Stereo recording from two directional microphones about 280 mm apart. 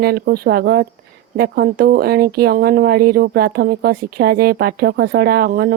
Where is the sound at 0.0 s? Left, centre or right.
Right.